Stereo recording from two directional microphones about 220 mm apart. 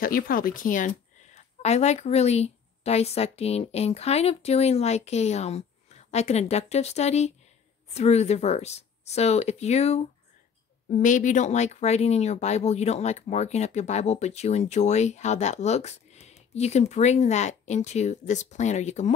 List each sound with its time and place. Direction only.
0.0 s a woman's voice: 40° left (ahead or behind)